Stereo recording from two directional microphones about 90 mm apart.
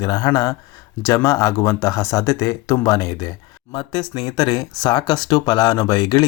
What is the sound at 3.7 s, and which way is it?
Speech, 55° left (ahead or behind).